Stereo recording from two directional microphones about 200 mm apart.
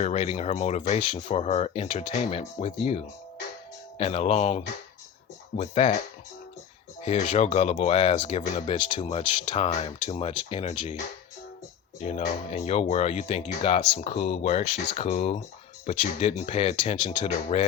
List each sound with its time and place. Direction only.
0.0 s speech: 35° left (ahead or behind)
7.0 s speech: 30° left (ahead or behind)